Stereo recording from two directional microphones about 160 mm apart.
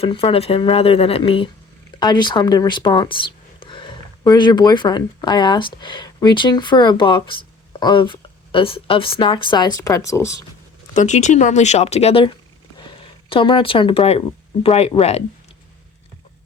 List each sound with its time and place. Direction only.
0.0 s speech: 35° left (ahead or behind); by 10.3 s 20° left (ahead or behind)
10.9 s speech: 50° left (ahead or behind)
13.3 s speech: 35° left (ahead or behind)